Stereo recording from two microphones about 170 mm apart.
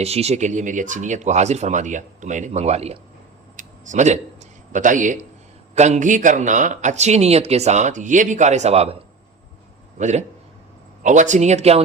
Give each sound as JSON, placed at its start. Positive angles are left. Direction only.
{"t": 0.0, "sound": "a man's voice", "side_deg": -40}
{"t": 3.6, "sound": "a sound", "side_deg": -45}
{"t": 4.7, "sound": "a man's voice", "side_deg": -50}